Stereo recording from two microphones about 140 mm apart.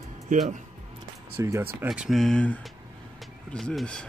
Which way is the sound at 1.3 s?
20° right (ahead or behind).